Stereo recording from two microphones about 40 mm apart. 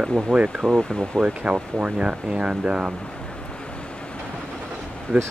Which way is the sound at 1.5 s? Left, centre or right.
Right.